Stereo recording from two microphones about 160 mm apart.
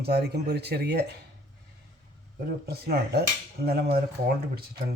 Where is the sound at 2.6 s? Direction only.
80° right.